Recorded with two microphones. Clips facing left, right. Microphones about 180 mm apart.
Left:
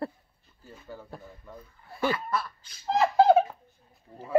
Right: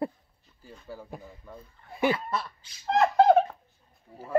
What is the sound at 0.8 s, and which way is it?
Speech, 10° right (ahead or behind).